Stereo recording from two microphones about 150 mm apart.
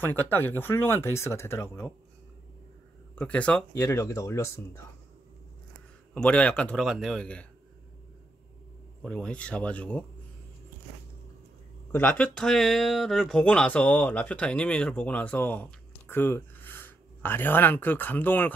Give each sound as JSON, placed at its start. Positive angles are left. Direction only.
{"t": 0.0, "sound": "speech", "side_deg": 15}
{"t": 3.2, "sound": "speech", "side_deg": 10}
{"t": 3.8, "sound": "speech", "side_deg": 20}
{"t": 6.1, "sound": "speech", "side_deg": 10}
{"t": 9.0, "sound": "speech", "side_deg": 5}
{"t": 11.9, "sound": "speech", "side_deg": 10}